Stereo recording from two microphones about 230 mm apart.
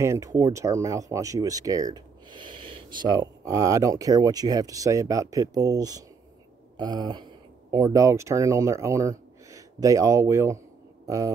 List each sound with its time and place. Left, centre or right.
0.0 s speech: centre